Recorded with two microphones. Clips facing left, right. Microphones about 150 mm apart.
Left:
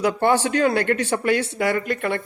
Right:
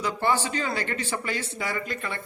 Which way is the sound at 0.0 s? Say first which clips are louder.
Left 7 dB; 60° left (ahead or behind).